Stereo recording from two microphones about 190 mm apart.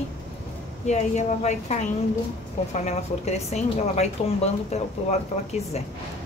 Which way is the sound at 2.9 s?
35° left (ahead or behind).